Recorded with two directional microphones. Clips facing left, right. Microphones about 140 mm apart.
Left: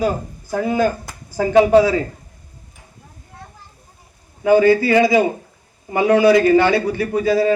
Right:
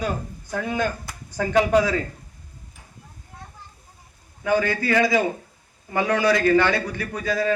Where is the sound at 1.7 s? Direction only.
30° left (ahead or behind).